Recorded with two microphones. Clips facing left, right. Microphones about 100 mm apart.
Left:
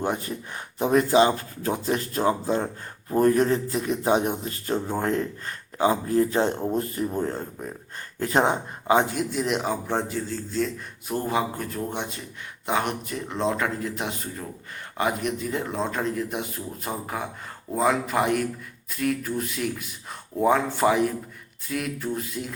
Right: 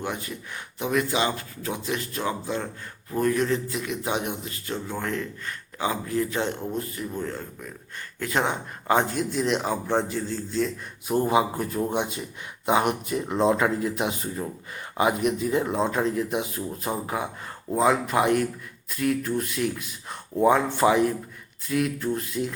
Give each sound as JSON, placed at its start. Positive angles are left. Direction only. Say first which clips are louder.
{"t": 0.0, "sound": "a man's voice", "louder": "left 4 dB", "side_deg": 35}
{"t": 8.9, "sound": "speech", "louder": "left 1 dB", "side_deg": 10}
{"t": 11.1, "sound": "speech", "louder": "right 4 dB", "side_deg": -10}